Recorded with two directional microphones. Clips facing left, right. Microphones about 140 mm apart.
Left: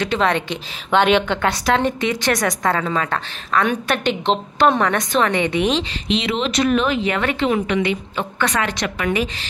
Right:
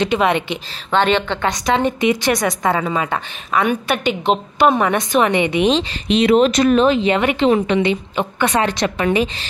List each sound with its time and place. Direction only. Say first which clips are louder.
0.0 s a woman's voice: right 3 dB; 15° right (ahead or behind)
0.9 s a woman's voice: left 1 dB; 5° left (ahead or behind)
1.9 s a woman's voice: right 3 dB; 10° right (ahead or behind)
6.0 s speech: right 10 dB; 50° right (ahead or behind); by 7.4 s 15° right (ahead or behind)
7.4 s a woman's voice: right 4 dB; 30° right (ahead or behind)